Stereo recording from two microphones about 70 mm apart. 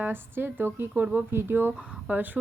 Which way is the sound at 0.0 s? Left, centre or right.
Right.